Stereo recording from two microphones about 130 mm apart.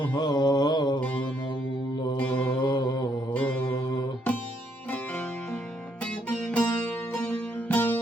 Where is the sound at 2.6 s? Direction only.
35° left (ahead or behind).